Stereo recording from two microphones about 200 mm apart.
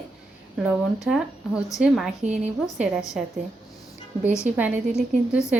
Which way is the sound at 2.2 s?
35° right (ahead or behind).